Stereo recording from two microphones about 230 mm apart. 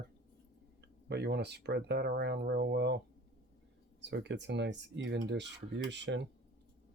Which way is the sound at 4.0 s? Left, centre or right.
Right.